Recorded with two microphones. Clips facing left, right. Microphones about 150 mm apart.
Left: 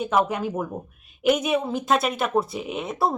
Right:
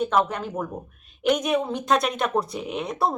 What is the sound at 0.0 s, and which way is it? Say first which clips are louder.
Speech: even; 10° left (ahead or behind).